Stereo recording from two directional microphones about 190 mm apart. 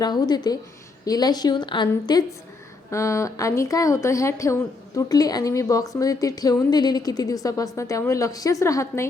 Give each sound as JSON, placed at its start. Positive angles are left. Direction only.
{"t": 0.0, "sound": "a woman's voice", "side_deg": 20}